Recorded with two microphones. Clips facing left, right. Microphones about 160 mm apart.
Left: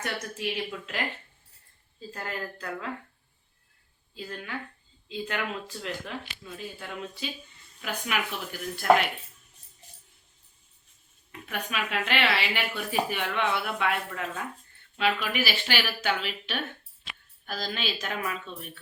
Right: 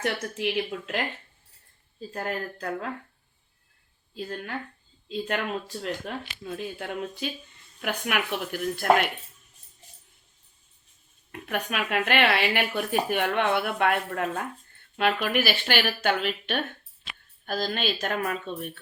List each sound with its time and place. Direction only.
0.0 s speech: 60° right (ahead or behind)
2.1 s a woman's voice: 50° right (ahead or behind)
4.1 s a woman's voice: 55° right (ahead or behind)
11.3 s a woman's voice: 50° right (ahead or behind)